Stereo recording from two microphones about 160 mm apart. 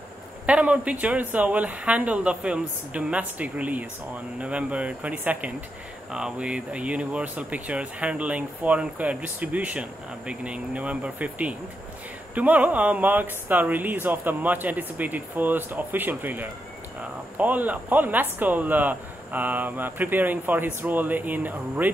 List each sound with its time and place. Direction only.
0.5 s speech: 10° right (ahead or behind)